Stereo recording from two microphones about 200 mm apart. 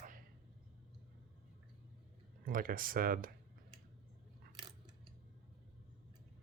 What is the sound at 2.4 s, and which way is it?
Speech, 45° right (ahead or behind).